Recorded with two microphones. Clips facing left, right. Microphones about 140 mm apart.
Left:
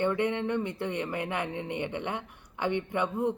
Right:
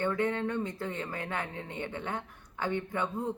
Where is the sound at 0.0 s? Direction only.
20° left (ahead or behind).